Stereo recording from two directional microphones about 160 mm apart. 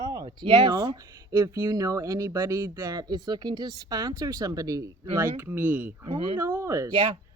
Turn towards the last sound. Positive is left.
turn(degrees=-35)  # may be behind; listen again after turning